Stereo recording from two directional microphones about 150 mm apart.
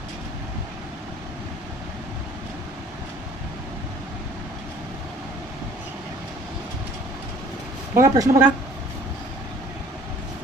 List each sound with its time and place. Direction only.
7.9 s a woman's voice: 20° right (ahead or behind)